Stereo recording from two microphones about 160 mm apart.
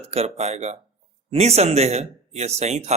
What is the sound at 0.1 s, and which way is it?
A man's voice, 40° right (ahead or behind).